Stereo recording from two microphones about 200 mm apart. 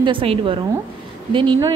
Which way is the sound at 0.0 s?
25° right (ahead or behind).